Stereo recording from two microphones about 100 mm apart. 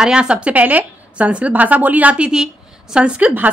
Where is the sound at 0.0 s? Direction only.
10° right (ahead or behind).